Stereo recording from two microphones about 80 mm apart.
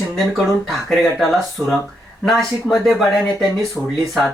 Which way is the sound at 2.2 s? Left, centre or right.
Centre.